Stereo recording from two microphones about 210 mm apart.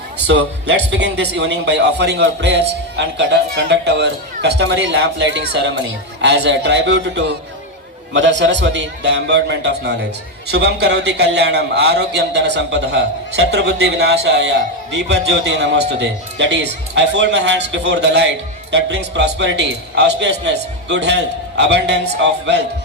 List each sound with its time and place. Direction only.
0.3 s a man's voice: 55° right (ahead or behind)